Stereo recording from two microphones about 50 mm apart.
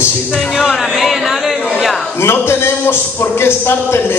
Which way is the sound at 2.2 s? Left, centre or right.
Left.